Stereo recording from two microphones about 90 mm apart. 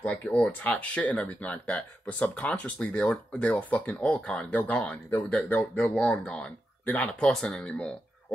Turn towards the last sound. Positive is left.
turn(degrees=10)  # may be behind; listen again after turning